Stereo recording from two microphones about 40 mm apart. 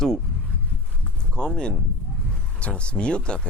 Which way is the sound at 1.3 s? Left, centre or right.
Left.